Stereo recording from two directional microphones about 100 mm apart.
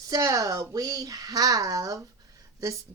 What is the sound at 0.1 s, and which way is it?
Speech, 35° right (ahead or behind).